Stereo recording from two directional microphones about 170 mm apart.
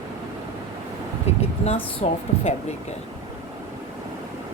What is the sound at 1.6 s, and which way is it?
Speech, 35° left (ahead or behind).